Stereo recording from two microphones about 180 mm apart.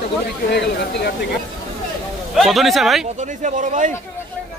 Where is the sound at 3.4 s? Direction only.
45° right (ahead or behind).